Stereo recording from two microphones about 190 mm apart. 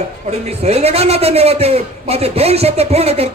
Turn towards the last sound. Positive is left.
turn(degrees=-30)  # may be behind; listen again after turning